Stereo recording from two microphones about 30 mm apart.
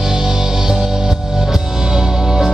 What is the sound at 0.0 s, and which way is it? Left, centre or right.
Music, centre.